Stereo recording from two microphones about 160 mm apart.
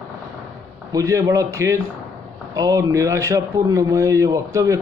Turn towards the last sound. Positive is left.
turn(degrees=-20)  # may be behind; listen again after turning